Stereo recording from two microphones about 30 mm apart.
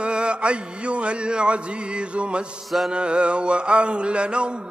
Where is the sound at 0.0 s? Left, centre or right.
Right.